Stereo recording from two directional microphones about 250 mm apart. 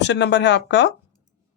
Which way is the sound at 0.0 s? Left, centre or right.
Left.